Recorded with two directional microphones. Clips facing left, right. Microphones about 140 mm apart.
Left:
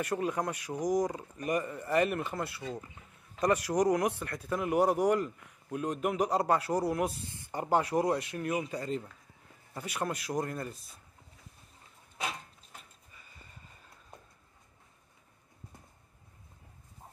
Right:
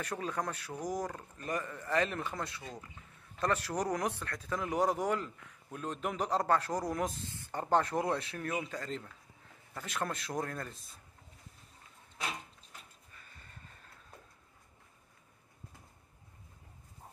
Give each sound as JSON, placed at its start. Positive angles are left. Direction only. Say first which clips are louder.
{"t": 0.0, "sound": "speech", "louder": "left 5 dB", "side_deg": 10}
{"t": 10.2, "sound": "speech", "louder": "left 4 dB", "side_deg": 5}
{"t": 13.1, "sound": "a sound", "louder": "left 1 dB", "side_deg": 5}